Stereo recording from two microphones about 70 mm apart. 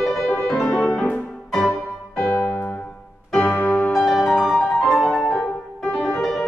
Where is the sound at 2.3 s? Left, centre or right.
Left.